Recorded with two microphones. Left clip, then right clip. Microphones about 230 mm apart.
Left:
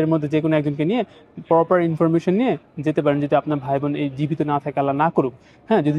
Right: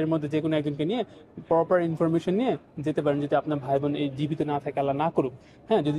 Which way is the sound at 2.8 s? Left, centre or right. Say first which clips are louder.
Left 8 dB; left.